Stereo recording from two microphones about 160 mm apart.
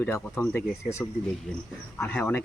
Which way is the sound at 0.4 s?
15° left (ahead or behind).